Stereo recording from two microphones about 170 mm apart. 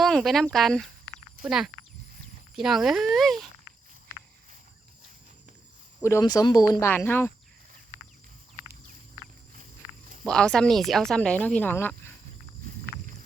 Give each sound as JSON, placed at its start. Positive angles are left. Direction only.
{"t": 0.0, "sound": "speech", "side_deg": 0}
{"t": 6.0, "sound": "speech", "side_deg": 15}
{"t": 10.2, "sound": "speech", "side_deg": 5}